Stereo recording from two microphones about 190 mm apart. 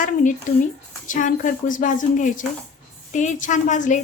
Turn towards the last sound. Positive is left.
turn(degrees=40)  # may be behind; listen again after turning